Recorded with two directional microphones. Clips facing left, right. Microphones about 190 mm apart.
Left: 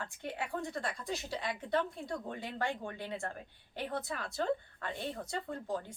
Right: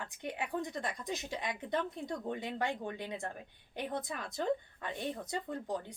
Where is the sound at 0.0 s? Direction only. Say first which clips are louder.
Even; 15° right (ahead or behind).